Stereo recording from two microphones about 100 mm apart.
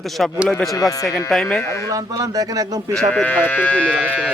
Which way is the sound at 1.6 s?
30° left (ahead or behind).